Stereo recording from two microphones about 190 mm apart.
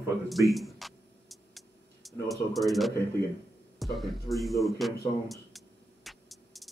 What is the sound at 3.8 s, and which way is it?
Speech, centre (ahead or behind).